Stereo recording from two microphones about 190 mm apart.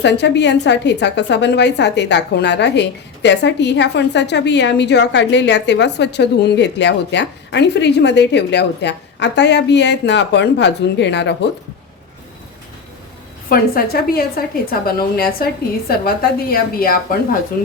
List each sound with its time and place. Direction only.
0.0 s a woman's voice: 65° left (ahead or behind)
13.5 s a woman's voice: 55° left (ahead or behind)